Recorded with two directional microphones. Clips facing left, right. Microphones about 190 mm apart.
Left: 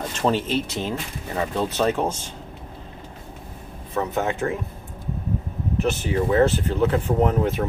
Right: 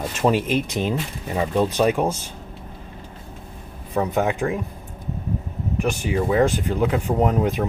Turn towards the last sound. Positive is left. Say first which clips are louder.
# even
turn(degrees=-15)  # may be behind; listen again after turning